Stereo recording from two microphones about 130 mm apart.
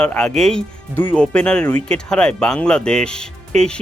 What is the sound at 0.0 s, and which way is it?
Speech, 5° left (ahead or behind).